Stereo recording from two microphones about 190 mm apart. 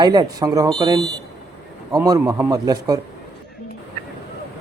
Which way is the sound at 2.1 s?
20° right (ahead or behind).